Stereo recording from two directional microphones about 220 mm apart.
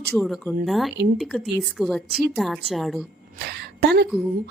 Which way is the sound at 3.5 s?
50° right (ahead or behind).